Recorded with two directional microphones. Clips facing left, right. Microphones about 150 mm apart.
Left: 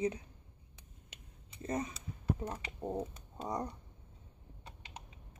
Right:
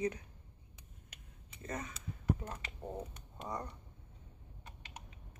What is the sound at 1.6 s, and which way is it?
Speech, 30° left (ahead or behind).